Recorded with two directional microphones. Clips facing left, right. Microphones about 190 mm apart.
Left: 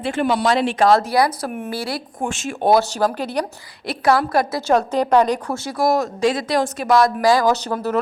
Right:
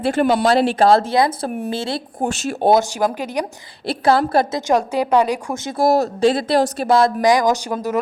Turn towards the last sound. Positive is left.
turn(degrees=-10)  # may be behind; listen again after turning